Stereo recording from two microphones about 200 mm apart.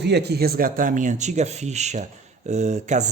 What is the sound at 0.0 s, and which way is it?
Speech, 55° right (ahead or behind).